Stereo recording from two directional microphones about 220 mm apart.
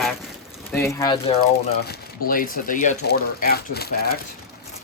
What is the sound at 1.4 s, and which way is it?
Speech, 45° left (ahead or behind).